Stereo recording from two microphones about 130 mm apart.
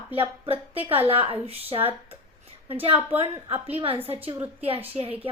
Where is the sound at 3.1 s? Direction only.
50° right (ahead or behind).